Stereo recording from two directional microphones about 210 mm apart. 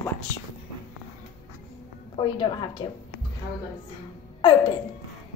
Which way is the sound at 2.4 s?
20° left (ahead or behind).